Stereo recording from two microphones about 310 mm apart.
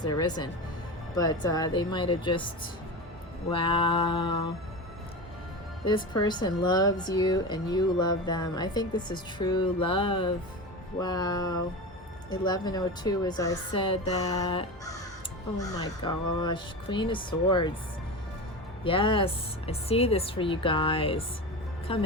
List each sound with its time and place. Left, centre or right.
0.0 s a woman's voice: centre
3.5 s a woman's voice: centre
5.8 s a woman's voice: centre
18.9 s a woman's voice: centre